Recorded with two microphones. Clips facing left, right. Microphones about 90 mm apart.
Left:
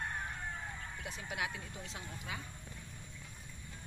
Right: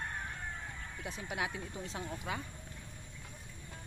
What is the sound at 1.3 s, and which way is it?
Speech, 25° right (ahead or behind).